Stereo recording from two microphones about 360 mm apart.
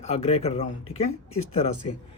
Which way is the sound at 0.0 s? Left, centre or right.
Centre.